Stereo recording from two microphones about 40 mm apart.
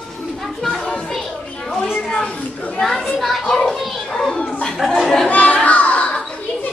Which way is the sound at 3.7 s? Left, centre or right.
Centre.